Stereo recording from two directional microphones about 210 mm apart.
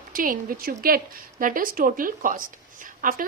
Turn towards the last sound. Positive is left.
turn(degrees=-40)  # may be behind; listen again after turning